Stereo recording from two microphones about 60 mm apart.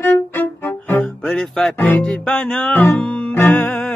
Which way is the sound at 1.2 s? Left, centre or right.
Centre.